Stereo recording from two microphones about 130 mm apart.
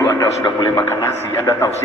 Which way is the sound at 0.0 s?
30° left (ahead or behind).